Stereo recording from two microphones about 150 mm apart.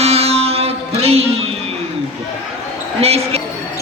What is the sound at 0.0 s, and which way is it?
Music, 45° right (ahead or behind).